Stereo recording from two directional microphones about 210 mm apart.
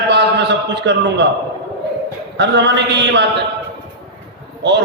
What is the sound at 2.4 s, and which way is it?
Speech, 55° right (ahead or behind).